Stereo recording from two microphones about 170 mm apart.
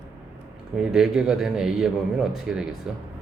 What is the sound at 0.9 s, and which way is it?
Speech, 5° right (ahead or behind).